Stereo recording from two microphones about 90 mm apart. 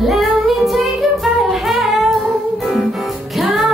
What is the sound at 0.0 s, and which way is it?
Music, centre (ahead or behind).